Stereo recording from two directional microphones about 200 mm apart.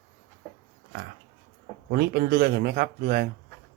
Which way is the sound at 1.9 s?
50° right (ahead or behind).